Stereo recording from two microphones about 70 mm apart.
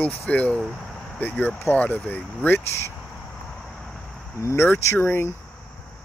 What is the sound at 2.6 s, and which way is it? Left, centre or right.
Speech, left.